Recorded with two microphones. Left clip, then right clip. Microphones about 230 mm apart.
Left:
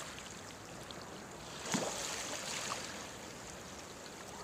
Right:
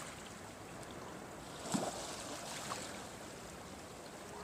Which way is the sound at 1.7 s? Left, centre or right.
Centre.